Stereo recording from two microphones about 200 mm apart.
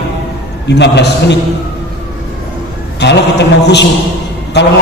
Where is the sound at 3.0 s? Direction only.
55° left (ahead or behind).